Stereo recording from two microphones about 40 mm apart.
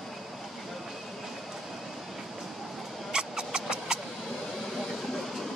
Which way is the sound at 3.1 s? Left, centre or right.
Centre.